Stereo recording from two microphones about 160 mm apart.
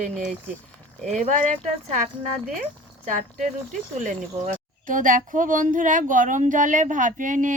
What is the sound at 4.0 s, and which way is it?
A woman's voice, 50° right (ahead or behind).